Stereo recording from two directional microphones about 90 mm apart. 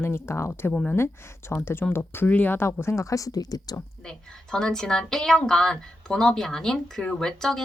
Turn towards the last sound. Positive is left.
turn(degrees=5)  # may be behind; listen again after turning